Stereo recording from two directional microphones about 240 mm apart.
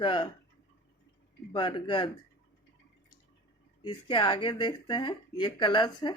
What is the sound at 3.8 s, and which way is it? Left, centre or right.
Speech, centre.